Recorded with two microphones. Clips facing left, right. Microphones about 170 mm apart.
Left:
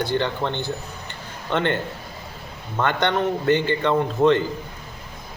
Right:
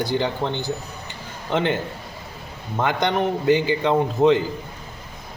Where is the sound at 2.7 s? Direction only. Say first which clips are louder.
Even; 10° right (ahead or behind).